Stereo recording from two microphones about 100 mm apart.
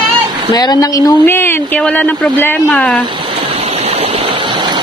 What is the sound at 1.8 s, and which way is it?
Speech, 15° left (ahead or behind).